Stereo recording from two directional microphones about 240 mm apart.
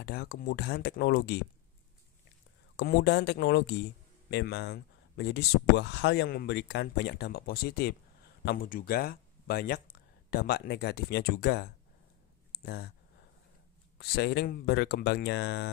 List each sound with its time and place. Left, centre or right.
0.0 s speech: left
2.7 s speech: left
13.9 s speech: left